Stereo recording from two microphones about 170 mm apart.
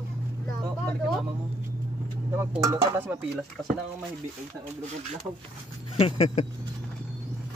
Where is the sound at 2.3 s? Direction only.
15° right (ahead or behind).